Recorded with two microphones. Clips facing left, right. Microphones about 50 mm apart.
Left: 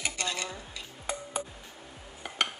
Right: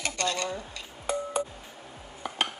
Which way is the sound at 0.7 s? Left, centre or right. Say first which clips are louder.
Right 6 dB; centre.